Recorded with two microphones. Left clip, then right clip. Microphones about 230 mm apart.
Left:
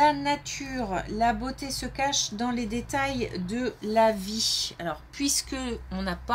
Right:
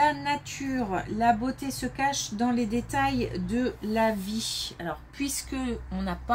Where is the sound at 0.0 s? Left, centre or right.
Left.